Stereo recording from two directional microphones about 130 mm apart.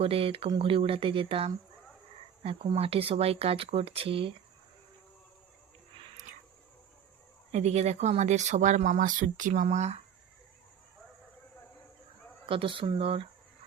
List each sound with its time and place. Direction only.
0.0 s speech: 45° right (ahead or behind)
7.5 s speech: 55° right (ahead or behind)
12.5 s speech: 45° right (ahead or behind)